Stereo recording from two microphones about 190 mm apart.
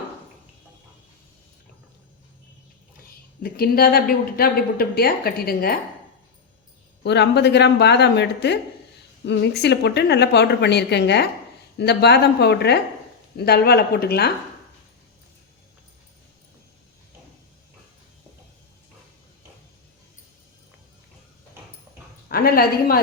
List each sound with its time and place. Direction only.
3.4 s a woman's voice: 55° left (ahead or behind)
7.0 s a woman's voice: 60° left (ahead or behind)
22.3 s a woman's voice: 50° left (ahead or behind)